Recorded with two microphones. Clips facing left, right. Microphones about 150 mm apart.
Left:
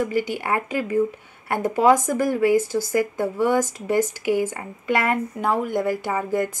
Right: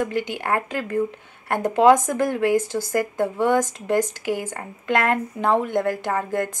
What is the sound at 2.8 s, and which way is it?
Speech, 50° right (ahead or behind).